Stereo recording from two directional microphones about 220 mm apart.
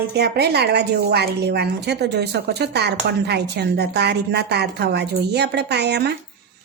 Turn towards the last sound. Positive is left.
turn(degrees=-50)  # may be behind; listen again after turning